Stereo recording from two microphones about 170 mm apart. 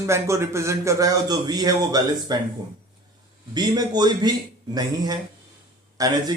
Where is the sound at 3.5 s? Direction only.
25° right (ahead or behind).